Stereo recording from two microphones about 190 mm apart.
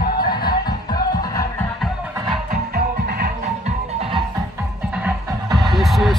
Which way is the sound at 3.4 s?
35° right (ahead or behind).